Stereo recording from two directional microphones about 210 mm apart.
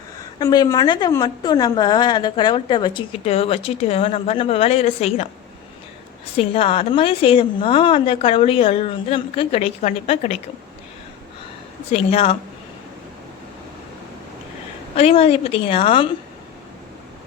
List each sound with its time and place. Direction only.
0.3 s a woman's voice: 20° left (ahead or behind)
6.3 s a woman's voice: 25° left (ahead or behind)
11.9 s a woman's voice: 30° left (ahead or behind)
14.9 s a woman's voice: 30° left (ahead or behind)